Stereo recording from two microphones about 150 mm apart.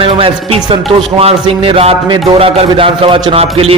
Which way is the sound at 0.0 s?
35° right (ahead or behind).